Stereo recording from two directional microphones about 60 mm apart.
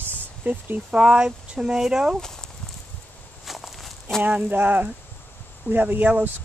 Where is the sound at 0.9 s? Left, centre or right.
Centre.